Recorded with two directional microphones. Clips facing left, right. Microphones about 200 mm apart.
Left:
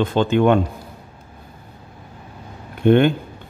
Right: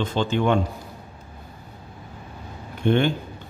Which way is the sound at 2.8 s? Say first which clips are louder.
Left 6 dB; 55° left (ahead or behind).